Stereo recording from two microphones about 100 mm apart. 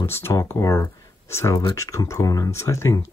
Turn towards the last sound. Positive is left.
turn(degrees=30)  # may be behind; listen again after turning